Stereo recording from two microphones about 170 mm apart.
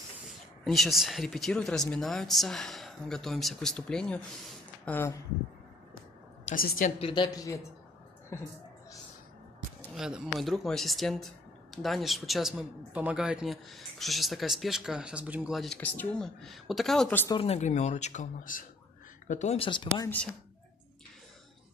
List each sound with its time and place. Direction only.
0.3 s speech: centre (ahead or behind)
6.5 s a woman's voice: 55° left (ahead or behind)
7.0 s a woman's voice: 25° left (ahead or behind)
9.9 s speech: 5° right (ahead or behind)
17.3 s speech: 35° left (ahead or behind)